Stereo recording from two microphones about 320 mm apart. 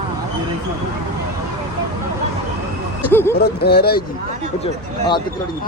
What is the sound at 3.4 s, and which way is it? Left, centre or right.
Speech, left.